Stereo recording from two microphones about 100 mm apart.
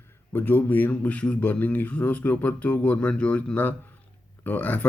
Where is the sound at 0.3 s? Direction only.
20° left (ahead or behind).